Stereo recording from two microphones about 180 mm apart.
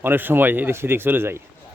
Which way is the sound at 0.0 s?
10° right (ahead or behind).